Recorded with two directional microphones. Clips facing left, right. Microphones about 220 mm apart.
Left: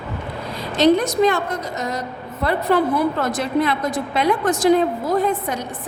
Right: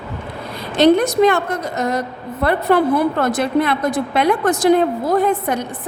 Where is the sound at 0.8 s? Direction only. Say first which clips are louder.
Right 3 dB; 60° right (ahead or behind).